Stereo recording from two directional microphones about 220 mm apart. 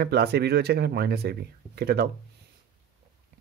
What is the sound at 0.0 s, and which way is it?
Speech, 45° right (ahead or behind).